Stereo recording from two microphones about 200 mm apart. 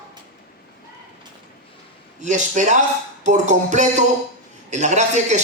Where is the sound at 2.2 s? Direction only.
40° right (ahead or behind).